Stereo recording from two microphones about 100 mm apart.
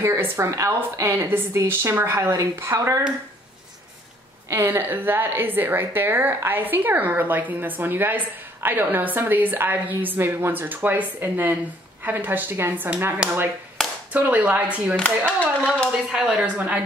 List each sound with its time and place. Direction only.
0.0 s a woman's voice: 30° right (ahead or behind)
4.5 s a woman's voice: 25° right (ahead or behind)
15.0 s speech: 10° left (ahead or behind)
16.1 s speech: 10° right (ahead or behind)